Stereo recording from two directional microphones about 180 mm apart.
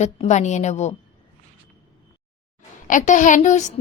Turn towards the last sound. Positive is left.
turn(degrees=40)  # may be behind; listen again after turning